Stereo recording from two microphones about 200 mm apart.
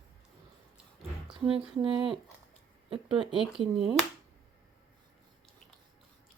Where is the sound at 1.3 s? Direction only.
25° right (ahead or behind).